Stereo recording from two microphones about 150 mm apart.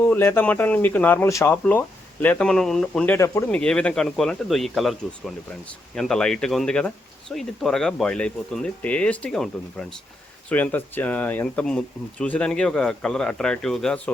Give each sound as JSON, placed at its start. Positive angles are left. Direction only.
{"t": 0.0, "sound": "speech", "side_deg": 15}
{"t": 3.2, "sound": "speech", "side_deg": 20}
{"t": 3.5, "sound": "speech", "side_deg": 5}